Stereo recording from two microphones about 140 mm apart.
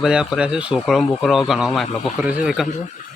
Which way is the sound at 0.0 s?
5° right (ahead or behind).